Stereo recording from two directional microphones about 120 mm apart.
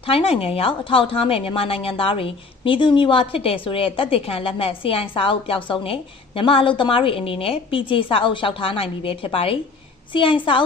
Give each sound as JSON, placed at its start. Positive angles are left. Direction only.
{"t": 0.0, "sound": "a woman's voice", "side_deg": 50}